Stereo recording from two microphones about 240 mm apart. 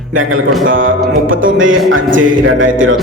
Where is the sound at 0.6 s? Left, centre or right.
Right.